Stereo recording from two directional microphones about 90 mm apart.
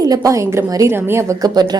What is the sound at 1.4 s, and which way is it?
Speech, 50° right (ahead or behind).